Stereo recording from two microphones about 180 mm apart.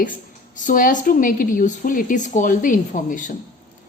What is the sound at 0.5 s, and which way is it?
A woman's voice, 45° left (ahead or behind).